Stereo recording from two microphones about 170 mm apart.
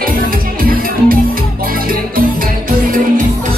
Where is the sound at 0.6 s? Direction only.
55° right (ahead or behind).